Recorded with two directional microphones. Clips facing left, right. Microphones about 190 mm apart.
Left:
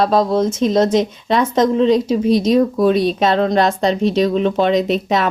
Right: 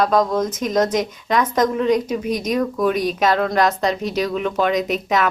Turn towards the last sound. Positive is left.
turn(degrees=30)  # may be behind; listen again after turning